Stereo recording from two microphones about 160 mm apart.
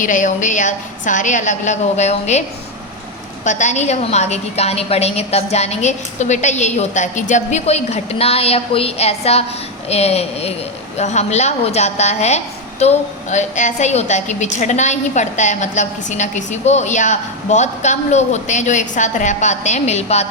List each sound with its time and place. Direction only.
0.0 s a woman's voice: 55° left (ahead or behind)
3.4 s a woman's voice: 50° left (ahead or behind)